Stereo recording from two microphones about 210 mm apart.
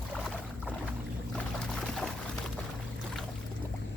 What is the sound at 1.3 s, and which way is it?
Pour, centre (ahead or behind).